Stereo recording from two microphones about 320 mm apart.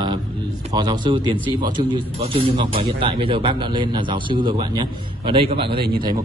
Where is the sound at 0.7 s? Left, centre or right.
Centre.